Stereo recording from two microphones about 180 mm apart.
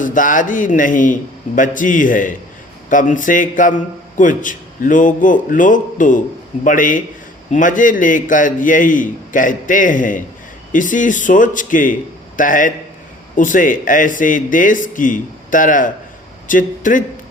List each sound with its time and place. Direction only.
0.0 s a man's voice: 45° left (ahead or behind)